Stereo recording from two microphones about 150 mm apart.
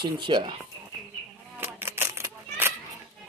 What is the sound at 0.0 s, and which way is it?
Speech, 30° right (ahead or behind).